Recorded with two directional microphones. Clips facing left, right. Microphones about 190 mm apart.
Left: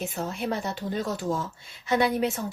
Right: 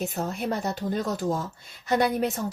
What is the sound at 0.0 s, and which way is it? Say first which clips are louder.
Speech: right 1 dB; 45° right (ahead or behind).